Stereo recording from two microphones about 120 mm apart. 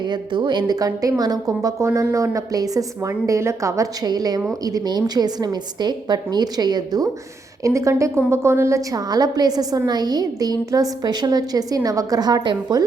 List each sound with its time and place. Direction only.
0.0 s a woman's voice: 40° right (ahead or behind)